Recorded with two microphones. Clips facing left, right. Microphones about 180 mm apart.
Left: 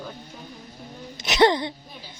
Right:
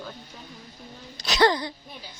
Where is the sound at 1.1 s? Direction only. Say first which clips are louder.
Left 3 dB; 25° left (ahead or behind).